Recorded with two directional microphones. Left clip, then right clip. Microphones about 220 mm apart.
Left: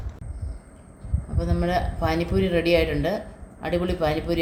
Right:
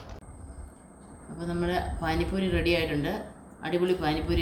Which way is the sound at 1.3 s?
35° left (ahead or behind).